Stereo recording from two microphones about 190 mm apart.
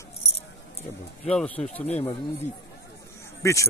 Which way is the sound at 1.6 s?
35° left (ahead or behind).